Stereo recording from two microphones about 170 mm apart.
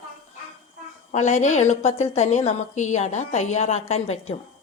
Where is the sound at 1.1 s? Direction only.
45° left (ahead or behind).